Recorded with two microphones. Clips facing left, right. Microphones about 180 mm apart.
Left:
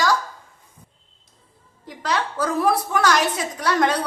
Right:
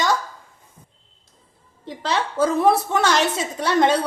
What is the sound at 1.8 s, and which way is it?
A woman's voice, 25° right (ahead or behind).